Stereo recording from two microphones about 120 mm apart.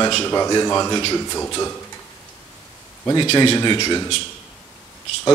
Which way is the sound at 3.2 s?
40° left (ahead or behind).